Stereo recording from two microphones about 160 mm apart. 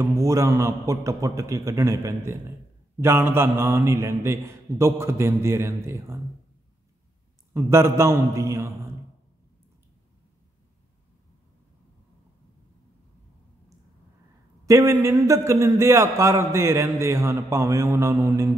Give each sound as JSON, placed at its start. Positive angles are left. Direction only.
{"t": 0.0, "sound": "a man's voice", "side_deg": -20}
{"t": 7.5, "sound": "a man's voice", "side_deg": -15}
{"t": 14.7, "sound": "a man's voice", "side_deg": -15}